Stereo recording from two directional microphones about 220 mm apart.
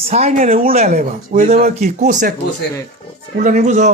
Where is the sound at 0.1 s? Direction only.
30° right (ahead or behind).